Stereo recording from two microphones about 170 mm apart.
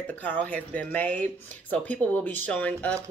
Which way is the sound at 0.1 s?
10° left (ahead or behind).